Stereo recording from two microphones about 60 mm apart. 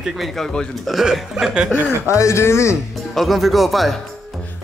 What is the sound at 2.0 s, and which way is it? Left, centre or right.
Speech, left.